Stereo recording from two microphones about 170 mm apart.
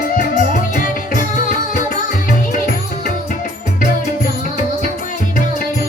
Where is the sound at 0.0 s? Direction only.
50° left (ahead or behind).